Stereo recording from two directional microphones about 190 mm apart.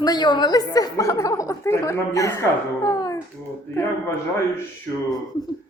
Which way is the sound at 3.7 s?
15° left (ahead or behind).